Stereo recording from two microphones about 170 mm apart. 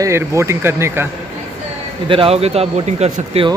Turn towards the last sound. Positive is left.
turn(degrees=-40)  # may be behind; listen again after turning